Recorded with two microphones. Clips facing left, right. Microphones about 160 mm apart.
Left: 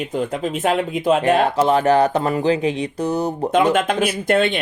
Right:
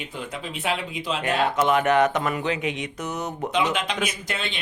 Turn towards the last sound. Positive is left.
turn(degrees=55)  # may be behind; listen again after turning